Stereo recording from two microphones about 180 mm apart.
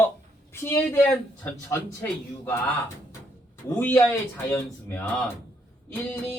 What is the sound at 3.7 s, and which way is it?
Speech, 10° left (ahead or behind).